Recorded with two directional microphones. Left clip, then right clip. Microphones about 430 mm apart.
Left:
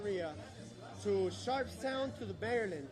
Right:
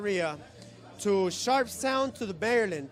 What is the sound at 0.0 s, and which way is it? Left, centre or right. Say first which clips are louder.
Speech: right 9 dB; right.